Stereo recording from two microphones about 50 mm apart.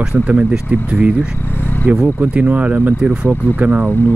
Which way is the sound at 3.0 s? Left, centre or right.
Centre.